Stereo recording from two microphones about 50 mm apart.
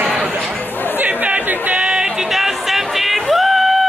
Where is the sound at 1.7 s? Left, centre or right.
Centre.